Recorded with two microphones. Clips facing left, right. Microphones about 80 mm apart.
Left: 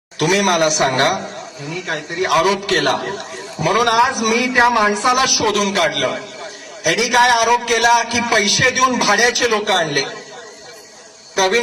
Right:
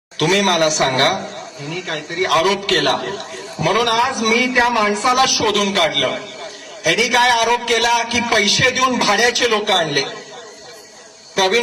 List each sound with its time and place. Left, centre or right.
0.2 s a man's voice: left
2.2 s a man's voice: left
11.3 s a man's voice: left